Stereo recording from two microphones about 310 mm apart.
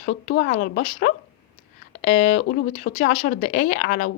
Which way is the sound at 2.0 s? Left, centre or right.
Left.